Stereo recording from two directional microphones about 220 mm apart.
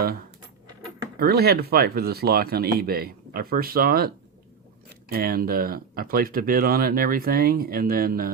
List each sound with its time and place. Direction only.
1.2 s speech: 45° right (ahead or behind)